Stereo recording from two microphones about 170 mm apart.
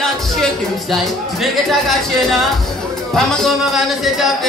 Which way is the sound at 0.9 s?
Centre (ahead or behind).